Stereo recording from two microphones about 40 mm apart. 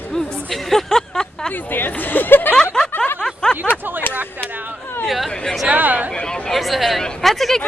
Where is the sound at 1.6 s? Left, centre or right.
Left.